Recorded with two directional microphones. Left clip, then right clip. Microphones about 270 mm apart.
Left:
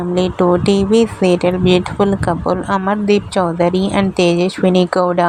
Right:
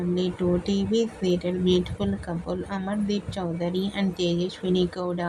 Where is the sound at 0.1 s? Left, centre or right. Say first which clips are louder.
Left 13 dB; left.